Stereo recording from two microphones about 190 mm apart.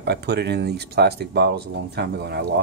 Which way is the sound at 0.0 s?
60° right (ahead or behind).